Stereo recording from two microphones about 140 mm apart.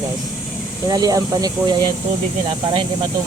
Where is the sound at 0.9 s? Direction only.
25° right (ahead or behind).